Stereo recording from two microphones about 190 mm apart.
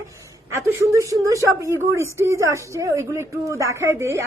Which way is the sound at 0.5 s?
15° right (ahead or behind).